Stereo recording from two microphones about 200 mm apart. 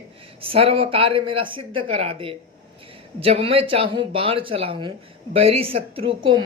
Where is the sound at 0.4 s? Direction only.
30° right (ahead or behind).